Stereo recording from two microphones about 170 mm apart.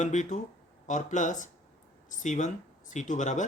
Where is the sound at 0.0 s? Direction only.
45° left (ahead or behind).